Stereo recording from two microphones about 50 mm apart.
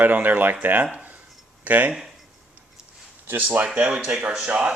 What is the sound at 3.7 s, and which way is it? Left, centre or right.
Speech, right.